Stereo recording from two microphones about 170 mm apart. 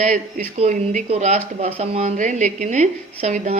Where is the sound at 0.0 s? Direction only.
45° right (ahead or behind).